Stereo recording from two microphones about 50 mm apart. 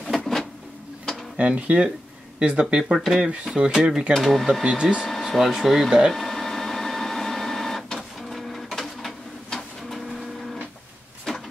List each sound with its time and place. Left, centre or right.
0.0 s a sound: centre
1.3 s speech: right
2.8 s speech: centre
4.1 s speech: centre
6.1 s printer: centre